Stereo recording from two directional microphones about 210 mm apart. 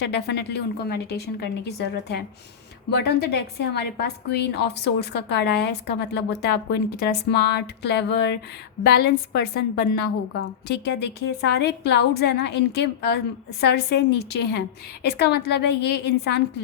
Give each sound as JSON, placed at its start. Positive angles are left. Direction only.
{"t": 0.0, "sound": "a woman's voice", "side_deg": 55}